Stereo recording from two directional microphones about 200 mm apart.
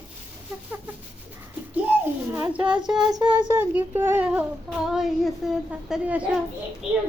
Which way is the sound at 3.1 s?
25° right (ahead or behind).